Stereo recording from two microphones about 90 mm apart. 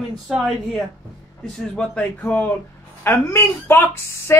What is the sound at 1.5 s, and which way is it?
Speech, 5° left (ahead or behind).